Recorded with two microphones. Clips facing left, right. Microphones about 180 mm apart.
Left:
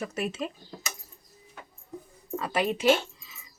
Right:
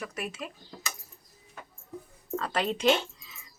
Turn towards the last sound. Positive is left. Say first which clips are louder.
# left 2 dB
turn(degrees=5)  # may be behind; listen again after turning